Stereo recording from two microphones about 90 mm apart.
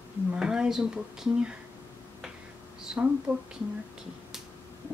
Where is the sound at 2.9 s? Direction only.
10° right (ahead or behind).